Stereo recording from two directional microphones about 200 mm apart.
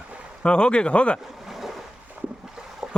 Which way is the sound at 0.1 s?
5° right (ahead or behind).